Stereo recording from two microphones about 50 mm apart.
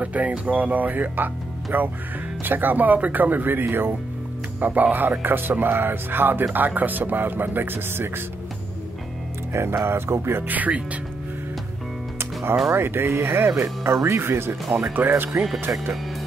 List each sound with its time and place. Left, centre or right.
0.0 s speech: right
4.6 s speech: right
9.5 s speech: right
10.4 s speech: right
12.7 s speech: right
15.0 s speech: right